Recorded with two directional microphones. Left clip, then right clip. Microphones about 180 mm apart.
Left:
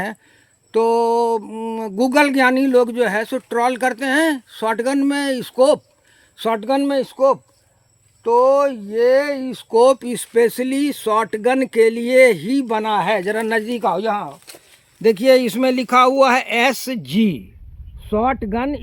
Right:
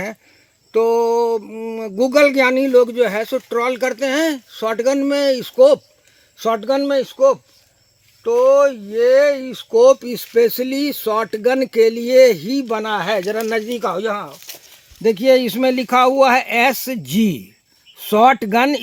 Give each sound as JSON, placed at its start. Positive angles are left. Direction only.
{"t": 0.7, "sound": "speech", "side_deg": 30}
{"t": 6.3, "sound": "speech", "side_deg": 25}
{"t": 8.4, "sound": "speech", "side_deg": 25}
{"t": 13.9, "sound": "speech", "side_deg": 40}
{"t": 15.0, "sound": "speech", "side_deg": -15}